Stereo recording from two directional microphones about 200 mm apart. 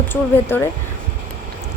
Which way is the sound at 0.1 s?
10° left (ahead or behind).